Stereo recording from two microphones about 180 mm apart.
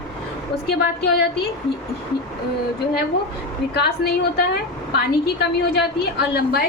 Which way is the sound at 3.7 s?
65° left (ahead or behind).